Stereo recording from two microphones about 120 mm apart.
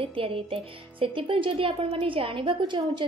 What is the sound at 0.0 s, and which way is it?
Speech, 50° right (ahead or behind).